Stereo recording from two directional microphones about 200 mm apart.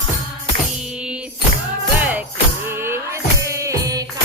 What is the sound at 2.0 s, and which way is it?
Music, 10° right (ahead or behind).